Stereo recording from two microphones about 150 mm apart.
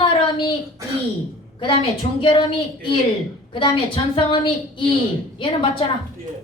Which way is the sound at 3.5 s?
35° left (ahead or behind).